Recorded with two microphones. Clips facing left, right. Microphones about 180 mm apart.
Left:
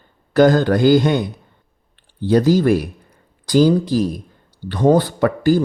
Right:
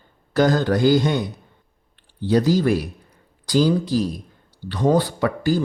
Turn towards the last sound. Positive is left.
turn(degrees=50)  # may be behind; listen again after turning